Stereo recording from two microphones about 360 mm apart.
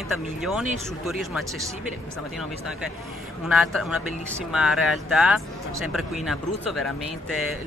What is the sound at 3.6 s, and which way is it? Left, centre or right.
Speech, centre.